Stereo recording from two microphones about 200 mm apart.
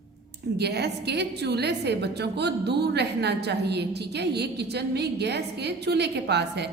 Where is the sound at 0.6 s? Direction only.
55° right (ahead or behind).